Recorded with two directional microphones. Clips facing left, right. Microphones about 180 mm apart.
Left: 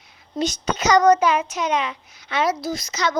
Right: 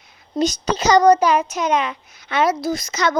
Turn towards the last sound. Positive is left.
turn(degrees=-50)  # may be behind; listen again after turning